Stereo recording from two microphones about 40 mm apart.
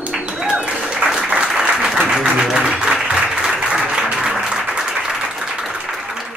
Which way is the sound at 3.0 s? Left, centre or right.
Centre.